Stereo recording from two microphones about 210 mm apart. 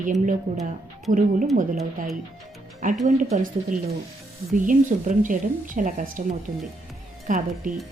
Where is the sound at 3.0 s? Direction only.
40° right (ahead or behind).